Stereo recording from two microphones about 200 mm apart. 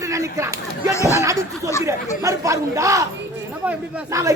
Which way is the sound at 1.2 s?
15° right (ahead or behind).